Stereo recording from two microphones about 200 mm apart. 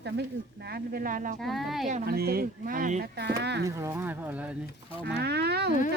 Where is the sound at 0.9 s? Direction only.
45° right (ahead or behind).